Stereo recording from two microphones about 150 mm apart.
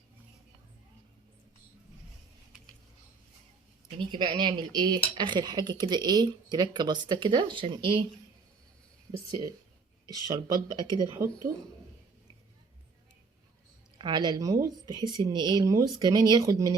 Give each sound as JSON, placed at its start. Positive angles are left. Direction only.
{"t": 3.9, "sound": "speech", "side_deg": -30}
{"t": 10.1, "sound": "speech", "side_deg": -25}
{"t": 14.0, "sound": "speech", "side_deg": -30}